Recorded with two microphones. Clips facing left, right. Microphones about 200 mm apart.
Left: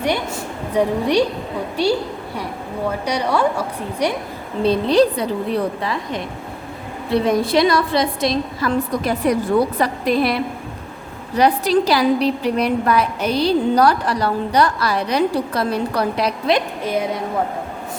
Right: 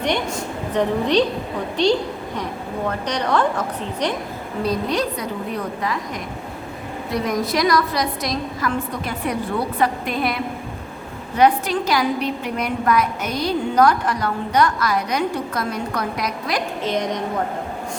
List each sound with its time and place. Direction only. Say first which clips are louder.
0.7 s a woman's voice: left 2 dB; 10° left (ahead or behind)
4.6 s a woman's voice: left 7 dB; 30° left (ahead or behind)
8.9 s a woman's voice: left 7 dB; 40° left (ahead or behind)
11.3 s a woman's voice: left 2 dB; 35° left (ahead or behind)
16.8 s a woman's voice: left 1 dB; 5° left (ahead or behind)